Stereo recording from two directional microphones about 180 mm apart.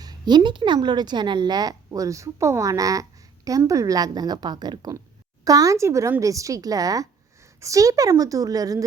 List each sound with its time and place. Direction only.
0.0 s speech: 25° right (ahead or behind)